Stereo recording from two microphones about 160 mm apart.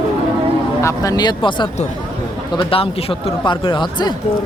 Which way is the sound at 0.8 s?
20° left (ahead or behind).